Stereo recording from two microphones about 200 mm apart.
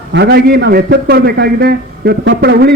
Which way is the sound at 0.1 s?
55° right (ahead or behind).